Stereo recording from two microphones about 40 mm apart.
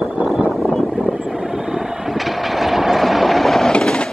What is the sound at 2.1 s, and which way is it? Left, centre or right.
Train, centre.